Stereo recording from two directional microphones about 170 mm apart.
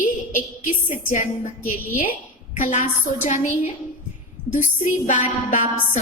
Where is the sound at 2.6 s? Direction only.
45° left (ahead or behind).